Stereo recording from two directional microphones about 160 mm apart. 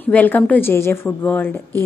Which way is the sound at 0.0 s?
10° left (ahead or behind).